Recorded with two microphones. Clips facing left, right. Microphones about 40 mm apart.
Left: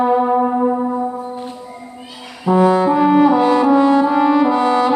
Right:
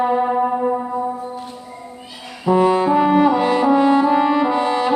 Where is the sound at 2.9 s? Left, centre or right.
Right.